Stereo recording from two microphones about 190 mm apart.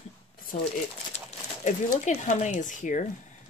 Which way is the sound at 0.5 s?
45° left (ahead or behind).